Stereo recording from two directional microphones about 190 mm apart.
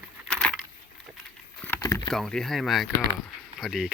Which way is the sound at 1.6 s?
15° left (ahead or behind).